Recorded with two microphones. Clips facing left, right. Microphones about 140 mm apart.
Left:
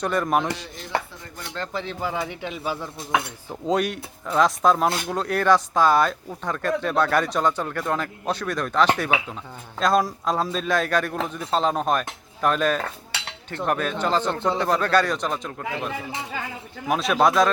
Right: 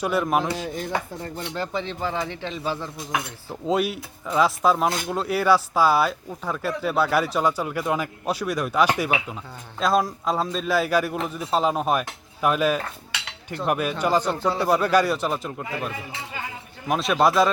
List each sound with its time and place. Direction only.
0.0 s speech: 5° right (ahead or behind)
0.5 s dishes: 50° right (ahead or behind)
1.5 s speech: 5° right (ahead or behind)
3.5 s speech: 5° right (ahead or behind)
16.9 s a man's voice: centre (ahead or behind)